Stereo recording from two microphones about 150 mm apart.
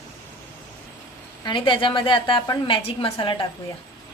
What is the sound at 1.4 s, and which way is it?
A woman's voice, 30° left (ahead or behind).